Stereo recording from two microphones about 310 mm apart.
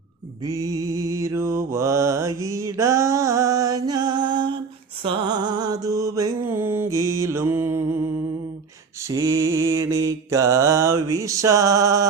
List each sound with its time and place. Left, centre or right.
0.4 s mantra: centre
9.0 s mantra: centre